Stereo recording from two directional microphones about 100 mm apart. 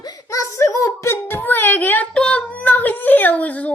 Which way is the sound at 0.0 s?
40° left (ahead or behind).